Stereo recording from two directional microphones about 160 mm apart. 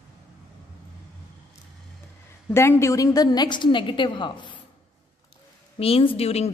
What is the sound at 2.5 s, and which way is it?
A woman's voice, 15° left (ahead or behind).